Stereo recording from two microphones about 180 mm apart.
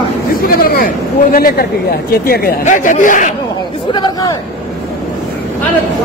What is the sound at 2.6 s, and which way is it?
Speech, 45° left (ahead or behind).